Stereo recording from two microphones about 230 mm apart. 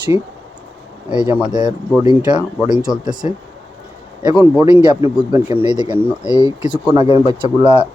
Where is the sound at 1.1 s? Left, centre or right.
Centre.